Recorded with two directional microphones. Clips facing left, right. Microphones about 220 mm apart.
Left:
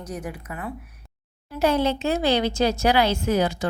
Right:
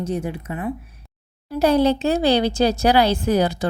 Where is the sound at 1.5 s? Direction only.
35° right (ahead or behind).